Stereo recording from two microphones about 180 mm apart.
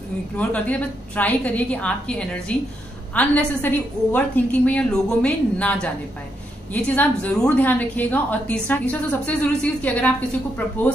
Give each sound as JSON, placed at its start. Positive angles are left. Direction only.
{"t": 0.4, "sound": "a woman's voice", "side_deg": 10}